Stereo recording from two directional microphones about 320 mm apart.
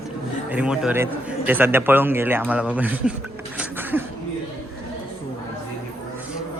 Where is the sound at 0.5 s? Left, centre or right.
Centre.